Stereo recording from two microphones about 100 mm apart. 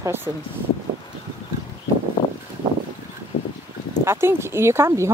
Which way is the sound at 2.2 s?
50° left (ahead or behind).